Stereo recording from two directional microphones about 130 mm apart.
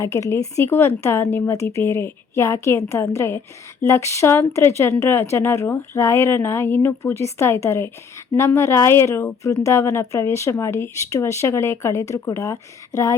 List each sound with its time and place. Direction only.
0.0 s speech: 20° left (ahead or behind)